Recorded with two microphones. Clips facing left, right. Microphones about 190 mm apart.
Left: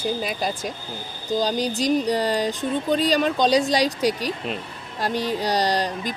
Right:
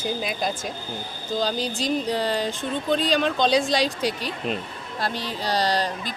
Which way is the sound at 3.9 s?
40° left (ahead or behind).